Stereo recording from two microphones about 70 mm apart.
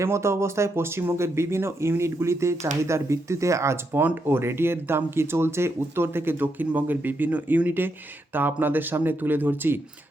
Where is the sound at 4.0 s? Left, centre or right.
Right.